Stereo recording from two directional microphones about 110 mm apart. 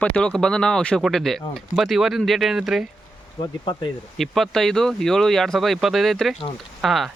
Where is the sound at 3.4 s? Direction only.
45° left (ahead or behind).